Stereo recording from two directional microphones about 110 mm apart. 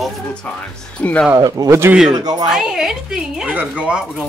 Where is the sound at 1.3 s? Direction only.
35° right (ahead or behind).